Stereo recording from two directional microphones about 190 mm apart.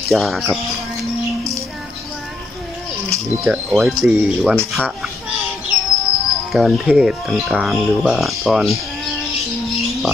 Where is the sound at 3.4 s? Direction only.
Centre (ahead or behind).